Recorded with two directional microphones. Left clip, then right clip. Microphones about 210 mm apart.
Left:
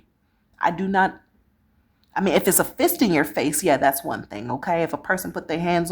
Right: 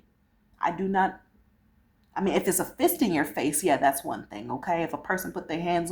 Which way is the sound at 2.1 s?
40° left (ahead or behind).